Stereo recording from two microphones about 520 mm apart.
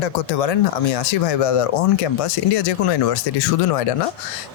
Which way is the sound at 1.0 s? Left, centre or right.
Left.